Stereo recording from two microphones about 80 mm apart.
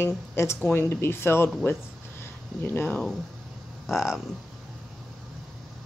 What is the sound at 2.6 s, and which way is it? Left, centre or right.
Speech, left.